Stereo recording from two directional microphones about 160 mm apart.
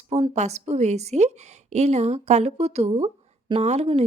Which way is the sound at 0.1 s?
40° right (ahead or behind).